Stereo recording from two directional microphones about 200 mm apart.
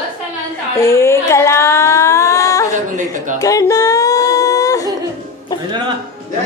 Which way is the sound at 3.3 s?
15° left (ahead or behind).